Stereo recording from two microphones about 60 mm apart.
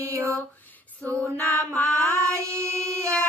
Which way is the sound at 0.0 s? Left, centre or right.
Right.